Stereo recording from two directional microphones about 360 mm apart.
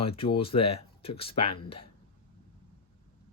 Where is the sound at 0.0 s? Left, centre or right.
Centre.